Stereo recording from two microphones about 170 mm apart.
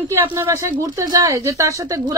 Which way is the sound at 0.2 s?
15° right (ahead or behind).